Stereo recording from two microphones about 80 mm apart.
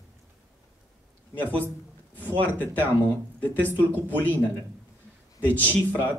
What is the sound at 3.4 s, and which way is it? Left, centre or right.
Speech, left.